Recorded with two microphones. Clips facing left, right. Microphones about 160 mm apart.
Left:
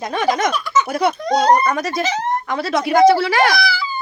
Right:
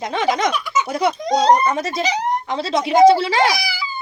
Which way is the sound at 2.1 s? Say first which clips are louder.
Even; 20° right (ahead or behind).